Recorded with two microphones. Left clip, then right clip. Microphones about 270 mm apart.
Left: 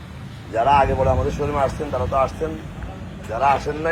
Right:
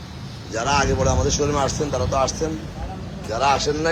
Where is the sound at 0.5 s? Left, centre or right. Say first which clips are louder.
Left 4 dB; centre.